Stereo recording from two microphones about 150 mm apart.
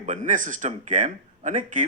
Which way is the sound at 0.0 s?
55° right (ahead or behind).